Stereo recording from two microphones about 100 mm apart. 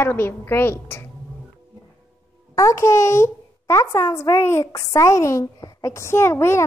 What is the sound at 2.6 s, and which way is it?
A child's voice, 30° left (ahead or behind).